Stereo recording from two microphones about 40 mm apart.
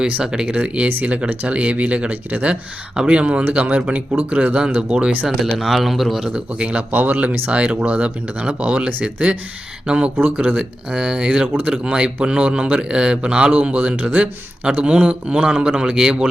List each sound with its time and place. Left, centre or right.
0.4 s a man's voice: right
4.4 s speech: right
4.8 s a man's voice: right
5.4 s a man's voice: centre
6.3 s a man's voice: right
6.9 s speech: right
7.5 s a man's voice: right
8.9 s speech: right
9.8 s a man's voice: right